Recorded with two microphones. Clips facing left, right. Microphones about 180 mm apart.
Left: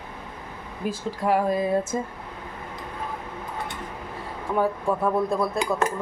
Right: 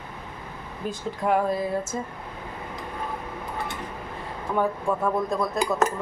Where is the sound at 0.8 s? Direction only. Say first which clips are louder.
Left 1 dB; 5° left (ahead or behind).